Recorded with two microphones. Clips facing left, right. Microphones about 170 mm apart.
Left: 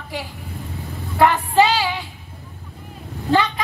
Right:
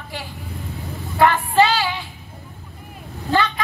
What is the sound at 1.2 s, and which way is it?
Vehicle, 15° left (ahead or behind).